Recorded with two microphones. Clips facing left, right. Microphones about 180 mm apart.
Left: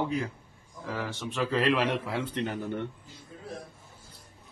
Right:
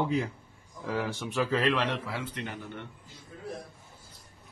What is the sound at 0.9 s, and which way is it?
Speech, 15° right (ahead or behind).